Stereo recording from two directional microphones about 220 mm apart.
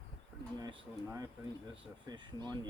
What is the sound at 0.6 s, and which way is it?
Speech, 20° right (ahead or behind).